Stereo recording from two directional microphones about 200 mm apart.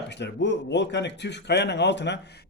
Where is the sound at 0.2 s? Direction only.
60° left (ahead or behind).